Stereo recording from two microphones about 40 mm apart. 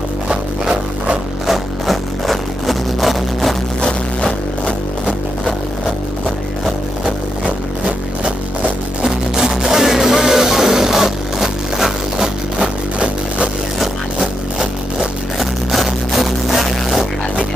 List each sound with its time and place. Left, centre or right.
0.3 s music: right
1.5 s music: centre
3.8 s music: left
9.0 s music: centre
12.5 s music: right
15.3 s music: centre